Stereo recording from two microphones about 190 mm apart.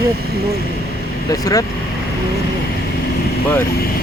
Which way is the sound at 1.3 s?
20° left (ahead or behind).